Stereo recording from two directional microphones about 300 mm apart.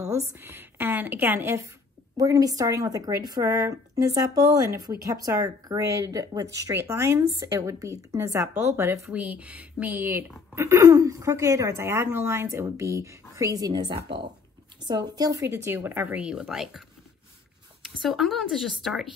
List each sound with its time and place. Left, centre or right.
0.0 s a woman's voice: centre
13.9 s speech: right
14.9 s speech: centre
17.8 s speech: centre